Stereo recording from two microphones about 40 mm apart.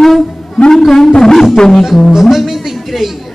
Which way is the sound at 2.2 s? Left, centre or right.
Centre.